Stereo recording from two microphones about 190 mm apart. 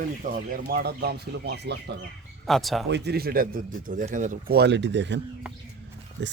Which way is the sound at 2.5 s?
Centre (ahead or behind).